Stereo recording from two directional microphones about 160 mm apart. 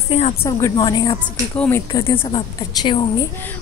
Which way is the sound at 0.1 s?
35° left (ahead or behind).